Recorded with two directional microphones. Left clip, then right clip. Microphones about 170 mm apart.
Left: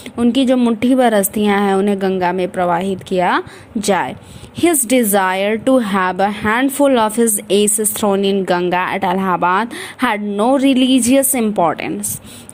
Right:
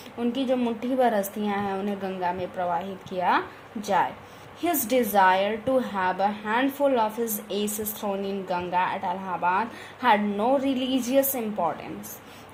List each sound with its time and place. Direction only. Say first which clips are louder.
0.2 s a woman's voice: left 11 dB; 45° left (ahead or behind)